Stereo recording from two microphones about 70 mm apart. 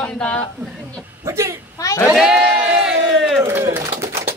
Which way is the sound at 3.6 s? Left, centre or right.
Right.